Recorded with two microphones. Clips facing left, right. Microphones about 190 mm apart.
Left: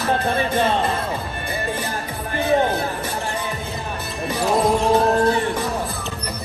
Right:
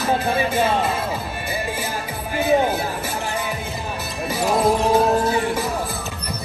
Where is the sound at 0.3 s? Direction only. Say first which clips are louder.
Even; 5° right (ahead or behind).